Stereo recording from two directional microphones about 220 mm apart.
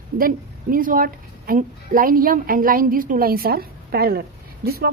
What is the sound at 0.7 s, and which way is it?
A woman's voice, 40° right (ahead or behind).